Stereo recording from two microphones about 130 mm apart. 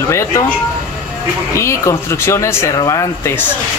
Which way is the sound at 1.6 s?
20° left (ahead or behind).